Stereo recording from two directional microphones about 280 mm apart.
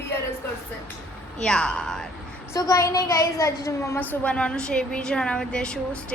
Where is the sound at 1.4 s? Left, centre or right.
Centre.